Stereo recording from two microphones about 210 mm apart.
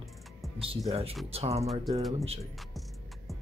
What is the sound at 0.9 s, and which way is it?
Speech, 30° right (ahead or behind).